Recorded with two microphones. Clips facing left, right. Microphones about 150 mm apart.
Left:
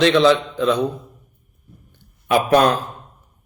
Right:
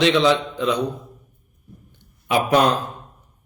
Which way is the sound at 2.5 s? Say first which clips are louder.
Left 2 dB; 55° left (ahead or behind).